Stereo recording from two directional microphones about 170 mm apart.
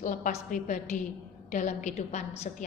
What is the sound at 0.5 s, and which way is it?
A woman's voice, 50° left (ahead or behind).